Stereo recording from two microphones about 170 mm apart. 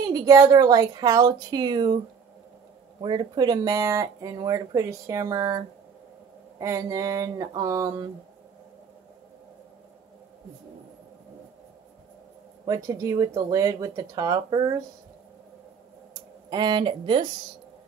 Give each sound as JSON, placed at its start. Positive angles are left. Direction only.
{"t": 0.1, "sound": "speech", "side_deg": -20}
{"t": 3.0, "sound": "speech", "side_deg": -25}
{"t": 12.6, "sound": "speech", "side_deg": -20}
{"t": 16.4, "sound": "speech", "side_deg": -25}